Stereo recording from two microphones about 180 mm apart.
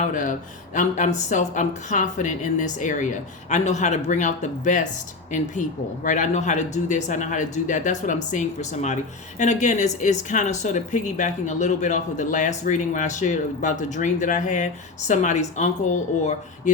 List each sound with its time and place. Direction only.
0.0 s speech: 45° left (ahead or behind)